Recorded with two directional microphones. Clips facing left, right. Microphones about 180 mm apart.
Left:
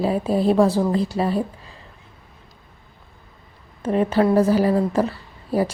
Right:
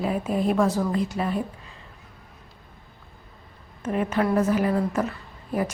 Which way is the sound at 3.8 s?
30° left (ahead or behind).